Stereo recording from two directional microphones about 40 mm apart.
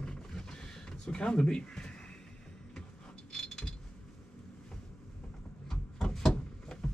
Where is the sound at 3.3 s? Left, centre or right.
Left.